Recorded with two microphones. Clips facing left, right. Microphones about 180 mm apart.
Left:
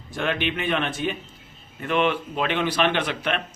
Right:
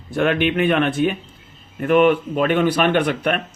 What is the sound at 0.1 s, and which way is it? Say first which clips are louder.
A man's voice: right 8 dB; 55° right (ahead or behind).